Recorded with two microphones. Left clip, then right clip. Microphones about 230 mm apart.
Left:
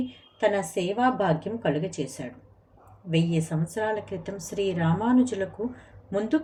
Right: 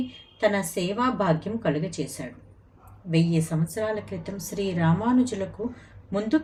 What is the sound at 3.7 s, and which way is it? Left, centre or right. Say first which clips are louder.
A woman's voice: left 2 dB; centre.